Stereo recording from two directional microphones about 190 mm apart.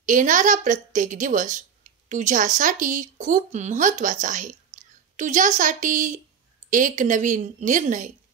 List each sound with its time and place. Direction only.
0.0 s a woman's voice: 40° right (ahead or behind)